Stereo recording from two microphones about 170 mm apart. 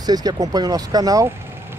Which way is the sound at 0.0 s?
25° right (ahead or behind).